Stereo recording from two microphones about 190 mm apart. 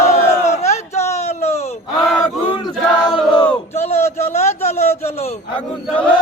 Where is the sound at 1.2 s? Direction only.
35° left (ahead or behind).